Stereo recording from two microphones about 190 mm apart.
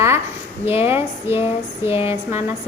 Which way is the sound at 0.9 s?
10° right (ahead or behind).